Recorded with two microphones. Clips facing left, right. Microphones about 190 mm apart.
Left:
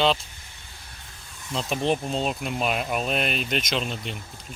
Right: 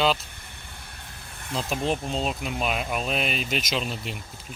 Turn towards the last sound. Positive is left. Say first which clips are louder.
# even
turn(degrees=-5)  # may be behind; listen again after turning